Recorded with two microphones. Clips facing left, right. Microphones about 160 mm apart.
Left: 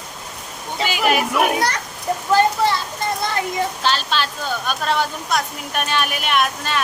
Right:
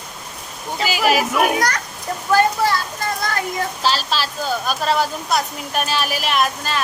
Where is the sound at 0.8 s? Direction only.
5° right (ahead or behind).